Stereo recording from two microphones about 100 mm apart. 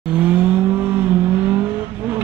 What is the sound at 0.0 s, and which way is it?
Vehicle, 15° right (ahead or behind).